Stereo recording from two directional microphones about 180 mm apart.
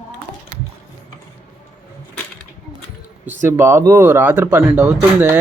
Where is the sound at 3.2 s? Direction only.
10° right (ahead or behind).